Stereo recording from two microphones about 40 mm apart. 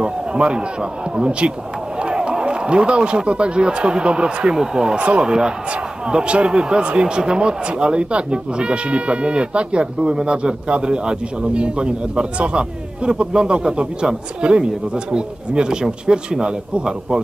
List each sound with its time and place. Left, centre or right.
0.0 s a sound: right
1.1 s a man's voice: right
4.9 s speech: right
5.2 s a man's voice: right